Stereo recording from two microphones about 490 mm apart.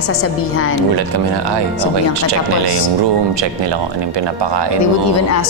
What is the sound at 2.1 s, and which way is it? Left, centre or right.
Speech, right.